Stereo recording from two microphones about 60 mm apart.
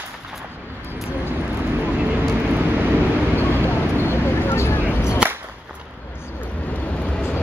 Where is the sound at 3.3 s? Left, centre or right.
Left.